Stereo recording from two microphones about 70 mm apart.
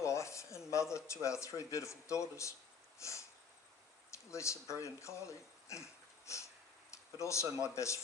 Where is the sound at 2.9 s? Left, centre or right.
Left.